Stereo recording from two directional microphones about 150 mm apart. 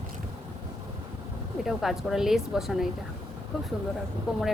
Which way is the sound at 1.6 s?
Centre (ahead or behind).